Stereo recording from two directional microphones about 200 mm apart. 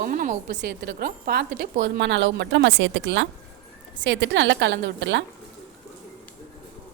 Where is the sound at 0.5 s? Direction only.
55° right (ahead or behind).